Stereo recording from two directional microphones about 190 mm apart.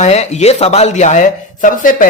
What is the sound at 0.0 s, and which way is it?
Speech, 35° left (ahead or behind).